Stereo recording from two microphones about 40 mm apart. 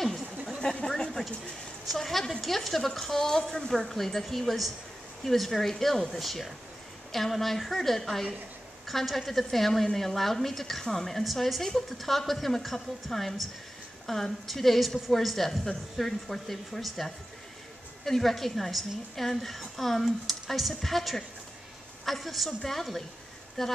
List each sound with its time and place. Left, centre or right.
0.8 s a sound: centre
1.9 s a woman's voice: centre
11.2 s a woman's voice: centre